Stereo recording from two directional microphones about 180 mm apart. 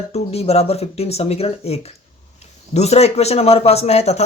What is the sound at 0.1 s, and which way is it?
Speech, 35° left (ahead or behind).